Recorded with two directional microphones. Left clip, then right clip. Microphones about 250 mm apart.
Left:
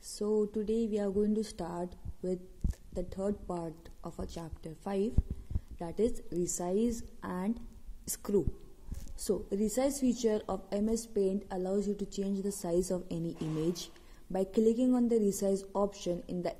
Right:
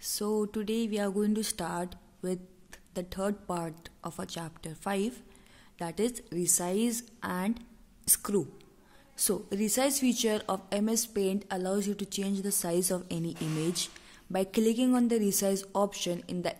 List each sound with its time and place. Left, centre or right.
0.2 s a sound: right
0.5 s a woman's voice: right
9.5 s a woman's voice: centre